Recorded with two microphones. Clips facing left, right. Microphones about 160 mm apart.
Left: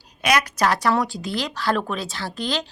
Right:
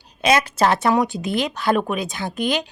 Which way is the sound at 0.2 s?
25° right (ahead or behind).